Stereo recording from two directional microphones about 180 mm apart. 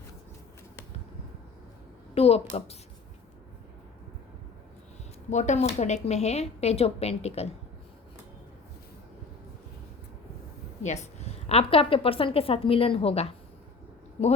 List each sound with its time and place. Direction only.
2.1 s a woman's voice: 35° left (ahead or behind)
5.3 s a woman's voice: 40° left (ahead or behind)
10.8 s a woman's voice: 40° left (ahead or behind)